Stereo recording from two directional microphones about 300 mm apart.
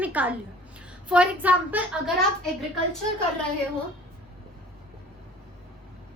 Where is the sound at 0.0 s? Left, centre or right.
Centre.